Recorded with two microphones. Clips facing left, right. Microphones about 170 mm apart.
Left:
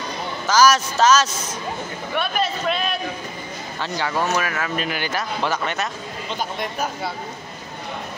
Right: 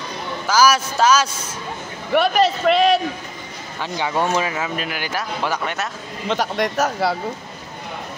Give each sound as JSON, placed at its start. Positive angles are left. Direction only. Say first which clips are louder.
{"t": 0.5, "sound": "speech", "louder": "even", "side_deg": -10}
{"t": 2.1, "sound": "speech", "louder": "right 8 dB", "side_deg": -75}
{"t": 3.8, "sound": "speech", "louder": "right 2 dB", "side_deg": -15}
{"t": 4.6, "sound": "speech", "louder": "left 1 dB", "side_deg": -5}
{"t": 6.2, "sound": "speech", "louder": "right 7 dB", "side_deg": -80}